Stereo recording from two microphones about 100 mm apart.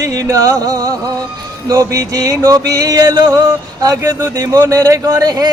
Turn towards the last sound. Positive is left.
turn(degrees=-40)  # may be behind; listen again after turning